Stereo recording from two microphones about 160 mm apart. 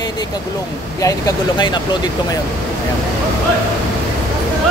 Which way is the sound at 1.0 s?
25° left (ahead or behind).